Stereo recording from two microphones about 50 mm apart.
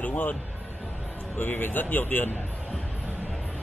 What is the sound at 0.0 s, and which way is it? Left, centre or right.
Music, left.